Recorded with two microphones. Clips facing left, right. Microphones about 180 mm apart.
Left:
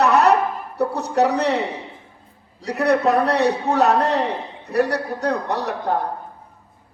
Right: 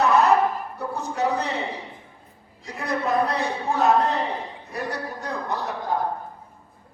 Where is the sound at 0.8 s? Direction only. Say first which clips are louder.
Left 9 dB; 70° left (ahead or behind).